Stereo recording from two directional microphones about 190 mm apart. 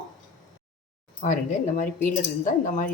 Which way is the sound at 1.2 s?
45° left (ahead or behind).